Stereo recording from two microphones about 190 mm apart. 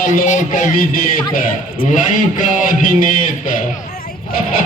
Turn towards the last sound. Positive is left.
turn(degrees=45)  # may be behind; listen again after turning